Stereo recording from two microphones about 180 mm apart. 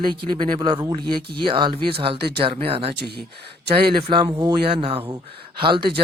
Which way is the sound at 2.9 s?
65° right (ahead or behind).